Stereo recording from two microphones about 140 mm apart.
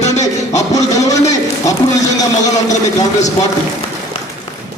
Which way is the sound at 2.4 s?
25° left (ahead or behind).